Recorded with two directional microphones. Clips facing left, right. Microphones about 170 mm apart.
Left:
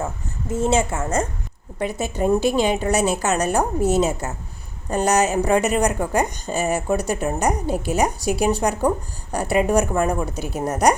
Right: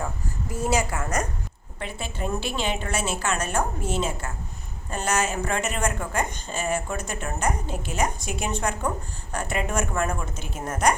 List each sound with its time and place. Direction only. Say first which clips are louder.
0.0 s a woman's voice: left 3 dB; 25° left (ahead or behind)
1.9 s a woman's voice: left 10 dB; 40° left (ahead or behind)
5.4 s speech: left 9 dB; 15° left (ahead or behind)
5.6 s a woman's voice: left 7 dB; 35° left (ahead or behind)